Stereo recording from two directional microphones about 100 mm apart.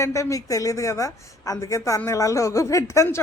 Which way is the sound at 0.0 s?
30° left (ahead or behind).